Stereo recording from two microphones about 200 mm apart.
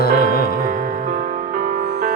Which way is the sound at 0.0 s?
50° left (ahead or behind).